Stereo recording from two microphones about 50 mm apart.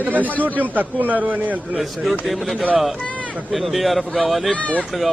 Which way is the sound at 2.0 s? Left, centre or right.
Centre.